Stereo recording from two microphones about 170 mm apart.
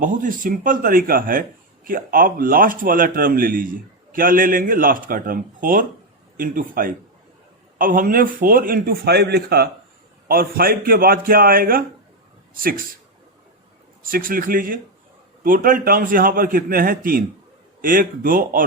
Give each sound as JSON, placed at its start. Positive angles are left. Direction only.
{"t": 0.0, "sound": "a man's voice", "side_deg": -50}
{"t": 10.2, "sound": "a man's voice", "side_deg": -60}
{"t": 14.1, "sound": "a man's voice", "side_deg": -55}